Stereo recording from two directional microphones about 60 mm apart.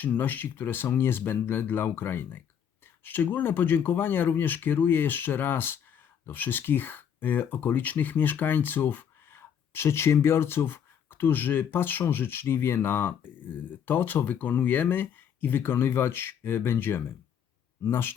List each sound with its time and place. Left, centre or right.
0.0 s speech: left